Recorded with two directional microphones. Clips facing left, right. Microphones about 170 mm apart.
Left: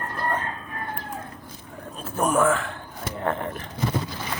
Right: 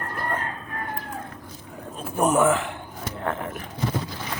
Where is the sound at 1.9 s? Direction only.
20° right (ahead or behind).